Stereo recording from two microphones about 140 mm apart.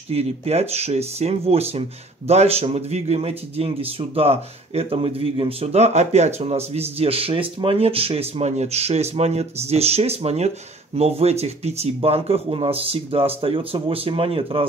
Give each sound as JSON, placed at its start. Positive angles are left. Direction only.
{"t": 0.1, "sound": "speech", "side_deg": -45}